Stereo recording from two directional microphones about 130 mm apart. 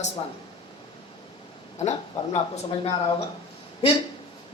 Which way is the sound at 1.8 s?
60° left (ahead or behind).